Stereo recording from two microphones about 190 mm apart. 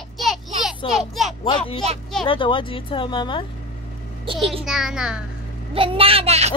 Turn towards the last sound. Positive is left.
turn(degrees=-35)  # may be behind; listen again after turning